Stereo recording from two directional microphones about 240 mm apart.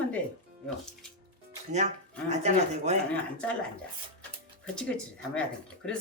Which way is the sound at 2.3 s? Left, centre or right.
Right.